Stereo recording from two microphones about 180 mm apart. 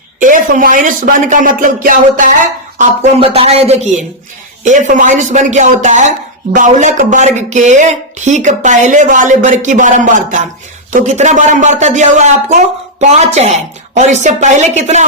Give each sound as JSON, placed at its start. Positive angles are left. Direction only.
{"t": 0.2, "sound": "speech", "side_deg": -45}